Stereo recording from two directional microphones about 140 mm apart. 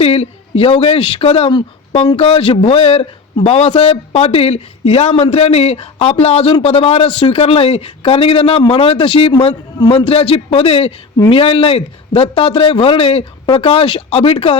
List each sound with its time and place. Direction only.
0.0 s a man's voice: 45° left (ahead or behind)